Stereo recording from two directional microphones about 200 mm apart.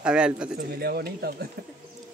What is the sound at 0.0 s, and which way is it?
Speech, 5° right (ahead or behind).